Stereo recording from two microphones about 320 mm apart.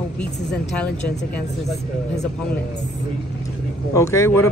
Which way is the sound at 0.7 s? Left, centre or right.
Centre.